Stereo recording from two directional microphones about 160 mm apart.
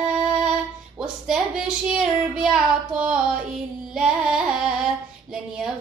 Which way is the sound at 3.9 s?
5° right (ahead or behind).